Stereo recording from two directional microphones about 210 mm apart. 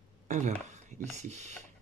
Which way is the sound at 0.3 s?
35° right (ahead or behind).